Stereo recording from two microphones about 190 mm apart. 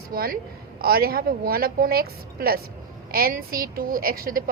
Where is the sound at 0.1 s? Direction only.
50° right (ahead or behind).